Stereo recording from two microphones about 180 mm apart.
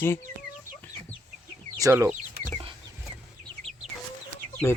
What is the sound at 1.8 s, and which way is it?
Speech, 15° right (ahead or behind).